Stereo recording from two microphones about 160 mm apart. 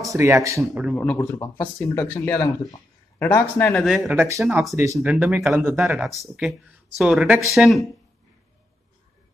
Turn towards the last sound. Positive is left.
turn(degrees=0)  # may be behind; listen again after turning